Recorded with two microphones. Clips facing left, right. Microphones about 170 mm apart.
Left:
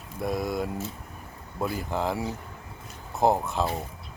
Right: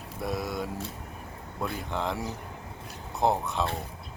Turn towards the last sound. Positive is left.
turn(degrees=0)  # may be behind; listen again after turning